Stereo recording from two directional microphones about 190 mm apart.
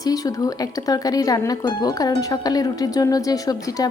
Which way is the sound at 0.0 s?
20° left (ahead or behind).